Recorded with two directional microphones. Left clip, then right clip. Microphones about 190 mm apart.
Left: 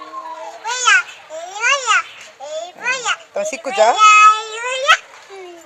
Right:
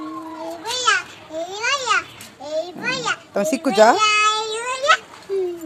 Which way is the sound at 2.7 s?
5° left (ahead or behind).